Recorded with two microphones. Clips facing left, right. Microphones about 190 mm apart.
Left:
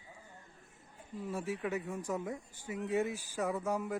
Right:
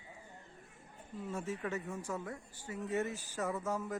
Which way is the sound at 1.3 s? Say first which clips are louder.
Left 2 dB; 10° left (ahead or behind).